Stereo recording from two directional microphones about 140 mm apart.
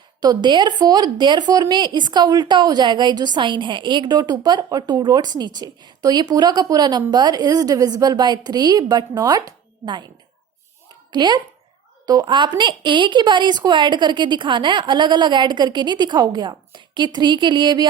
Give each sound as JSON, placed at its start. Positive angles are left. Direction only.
{"t": 0.2, "sound": "a woman's voice", "side_deg": -30}
{"t": 11.1, "sound": "a child's voice", "side_deg": -30}